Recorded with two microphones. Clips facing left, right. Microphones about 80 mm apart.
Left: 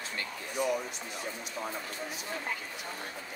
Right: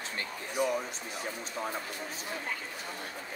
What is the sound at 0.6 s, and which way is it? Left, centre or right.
Speech, right.